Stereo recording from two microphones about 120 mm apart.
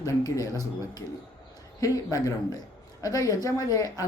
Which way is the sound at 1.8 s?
30° left (ahead or behind).